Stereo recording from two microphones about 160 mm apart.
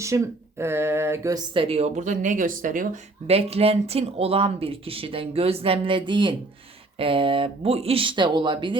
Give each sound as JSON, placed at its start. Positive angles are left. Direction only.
{"t": 0.0, "sound": "speech", "side_deg": -20}
{"t": 1.5, "sound": "speech", "side_deg": -35}
{"t": 3.2, "sound": "speech", "side_deg": -40}